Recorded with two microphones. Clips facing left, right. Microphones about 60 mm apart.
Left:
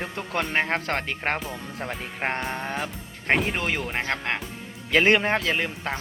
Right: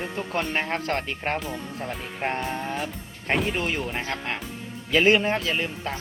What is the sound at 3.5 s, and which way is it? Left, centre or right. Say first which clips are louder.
Speech: even; left.